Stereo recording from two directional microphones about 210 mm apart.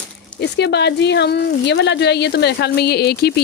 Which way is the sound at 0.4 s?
55° left (ahead or behind).